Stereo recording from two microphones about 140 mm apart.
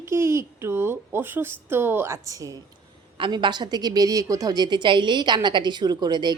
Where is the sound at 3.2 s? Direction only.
35° right (ahead or behind).